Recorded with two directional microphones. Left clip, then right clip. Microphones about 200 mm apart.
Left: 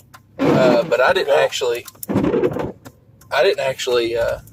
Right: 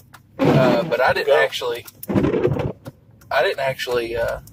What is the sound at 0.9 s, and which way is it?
Speech, 40° left (ahead or behind).